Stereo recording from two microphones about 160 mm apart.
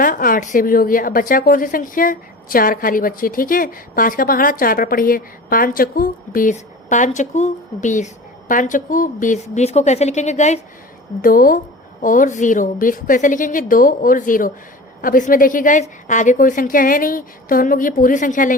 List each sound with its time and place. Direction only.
0.0 s a woman's voice: 60° left (ahead or behind)
11.2 s a woman's voice: 60° left (ahead or behind)